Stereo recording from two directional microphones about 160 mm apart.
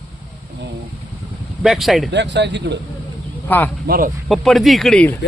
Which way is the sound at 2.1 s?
90° right.